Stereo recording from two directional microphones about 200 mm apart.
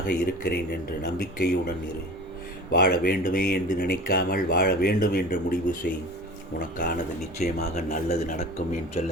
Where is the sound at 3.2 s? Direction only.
45° left (ahead or behind).